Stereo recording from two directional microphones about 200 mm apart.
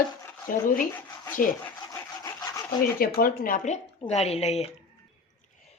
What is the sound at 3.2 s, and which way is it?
Speech, 45° left (ahead or behind).